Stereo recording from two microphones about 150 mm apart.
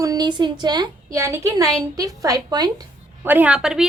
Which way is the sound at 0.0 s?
25° right (ahead or behind).